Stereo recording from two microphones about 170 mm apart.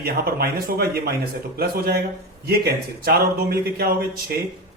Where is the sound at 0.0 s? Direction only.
65° right (ahead or behind).